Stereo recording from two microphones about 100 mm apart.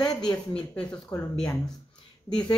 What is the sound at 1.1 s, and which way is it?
Speech, 35° left (ahead or behind).